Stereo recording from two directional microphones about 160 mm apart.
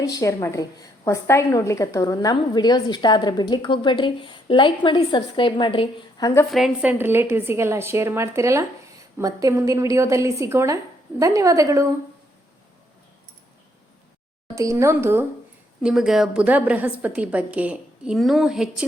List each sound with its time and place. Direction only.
0.0 s a woman's voice: 20° left (ahead or behind)
6.5 s a woman's voice: centre (ahead or behind)
7.0 s a woman's voice: 15° right (ahead or behind)
14.5 s speech: 20° right (ahead or behind)
15.8 s a woman's voice: 5° right (ahead or behind)